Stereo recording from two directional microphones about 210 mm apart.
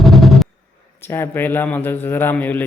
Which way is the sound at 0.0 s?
Centre (ahead or behind).